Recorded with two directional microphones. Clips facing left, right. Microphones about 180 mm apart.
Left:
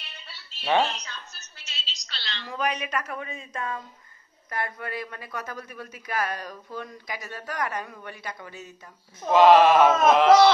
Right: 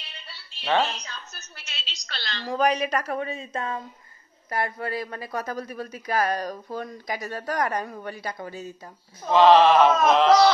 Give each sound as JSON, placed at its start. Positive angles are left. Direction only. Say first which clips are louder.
{"t": 0.6, "sound": "speech", "louder": "even", "side_deg": 15}
{"t": 1.6, "sound": "a woman's voice", "louder": "even", "side_deg": -60}
{"t": 9.2, "sound": "speech", "louder": "even", "side_deg": 10}